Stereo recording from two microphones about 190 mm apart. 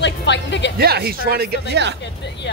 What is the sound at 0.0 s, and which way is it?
Music, 65° left (ahead or behind).